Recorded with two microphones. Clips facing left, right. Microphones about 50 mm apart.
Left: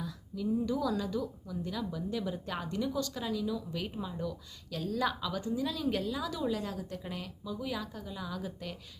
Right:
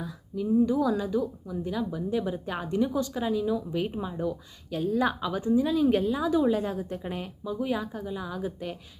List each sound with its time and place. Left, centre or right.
0.0 s a woman's voice: right